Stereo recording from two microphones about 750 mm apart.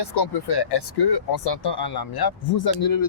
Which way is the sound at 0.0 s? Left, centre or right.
Left.